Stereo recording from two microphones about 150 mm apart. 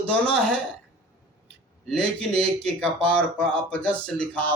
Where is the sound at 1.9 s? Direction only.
5° left (ahead or behind).